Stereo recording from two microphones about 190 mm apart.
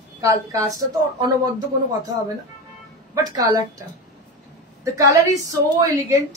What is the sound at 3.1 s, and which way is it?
Speech, 20° right (ahead or behind).